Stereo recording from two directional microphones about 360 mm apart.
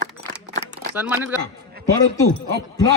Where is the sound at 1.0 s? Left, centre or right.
Centre.